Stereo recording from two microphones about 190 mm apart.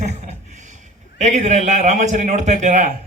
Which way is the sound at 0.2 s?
40° right (ahead or behind).